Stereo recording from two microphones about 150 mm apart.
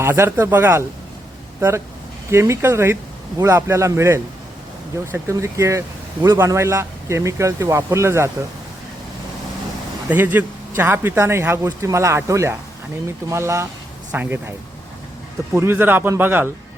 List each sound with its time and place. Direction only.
0.0 s speech: 15° right (ahead or behind)
2.3 s speech: 15° right (ahead or behind)
10.1 s speech: 10° right (ahead or behind)
15.5 s speech: 15° right (ahead or behind)